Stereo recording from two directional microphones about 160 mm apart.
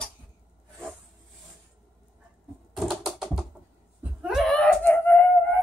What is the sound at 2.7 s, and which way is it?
Typing, centre (ahead or behind).